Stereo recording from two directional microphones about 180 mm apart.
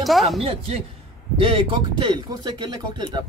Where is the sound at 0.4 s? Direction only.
30° right (ahead or behind).